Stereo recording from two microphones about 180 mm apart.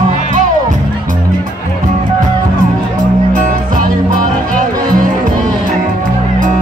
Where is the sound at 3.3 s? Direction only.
45° right (ahead or behind).